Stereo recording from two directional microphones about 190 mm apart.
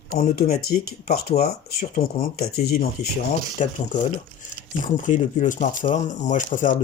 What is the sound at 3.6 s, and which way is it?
Speech, 40° left (ahead or behind).